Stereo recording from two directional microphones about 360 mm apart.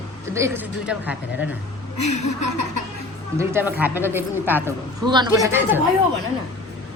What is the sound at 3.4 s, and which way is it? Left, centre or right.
A woman's voice, centre.